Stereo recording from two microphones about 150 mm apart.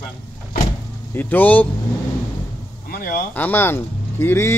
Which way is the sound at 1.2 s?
10° left (ahead or behind).